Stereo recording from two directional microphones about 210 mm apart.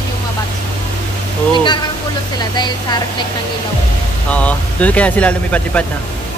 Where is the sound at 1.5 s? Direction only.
20° left (ahead or behind).